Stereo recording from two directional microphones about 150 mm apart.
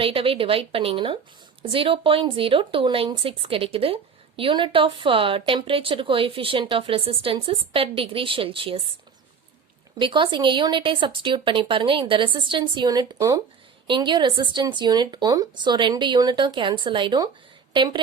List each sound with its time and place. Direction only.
0.0 s speech: 40° right (ahead or behind)
10.0 s speech: 30° right (ahead or behind)